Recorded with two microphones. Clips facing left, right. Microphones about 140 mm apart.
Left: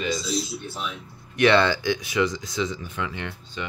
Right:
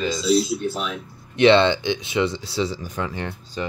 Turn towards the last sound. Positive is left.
turn(degrees=-35)  # may be behind; listen again after turning